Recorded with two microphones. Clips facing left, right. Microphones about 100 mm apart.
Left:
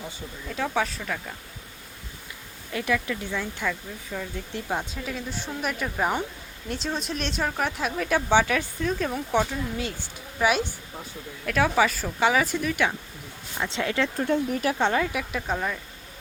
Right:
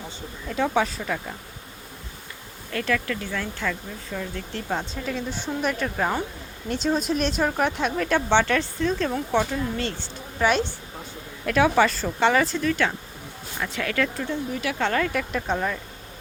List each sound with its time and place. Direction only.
0.4 s speech: centre (ahead or behind)
2.7 s speech: 15° left (ahead or behind)
11.4 s speech: centre (ahead or behind); by 14.1 s 25° left (ahead or behind)
14.3 s speech: 50° left (ahead or behind)
14.8 s speech: 15° left (ahead or behind); by 15.8 s centre (ahead or behind)